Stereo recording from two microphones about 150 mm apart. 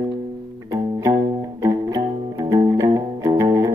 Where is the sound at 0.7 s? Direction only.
20° right (ahead or behind).